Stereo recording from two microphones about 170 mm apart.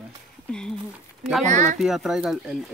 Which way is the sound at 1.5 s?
45° right (ahead or behind).